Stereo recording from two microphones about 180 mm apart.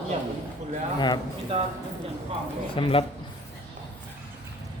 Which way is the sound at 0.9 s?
25° left (ahead or behind).